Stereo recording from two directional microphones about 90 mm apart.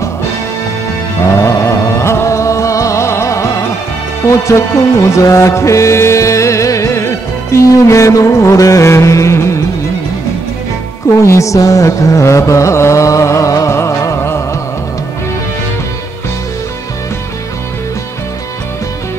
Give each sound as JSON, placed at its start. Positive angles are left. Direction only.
{"t": 1.4, "sound": "music", "side_deg": 35}
{"t": 11.1, "sound": "music", "side_deg": 35}